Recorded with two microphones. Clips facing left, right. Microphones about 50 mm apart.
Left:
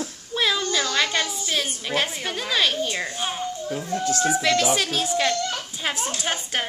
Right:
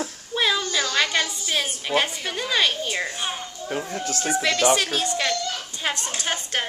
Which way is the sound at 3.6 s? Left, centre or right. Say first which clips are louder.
Right 1 dB; right.